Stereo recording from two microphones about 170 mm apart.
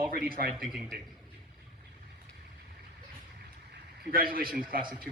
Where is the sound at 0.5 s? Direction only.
Centre (ahead or behind).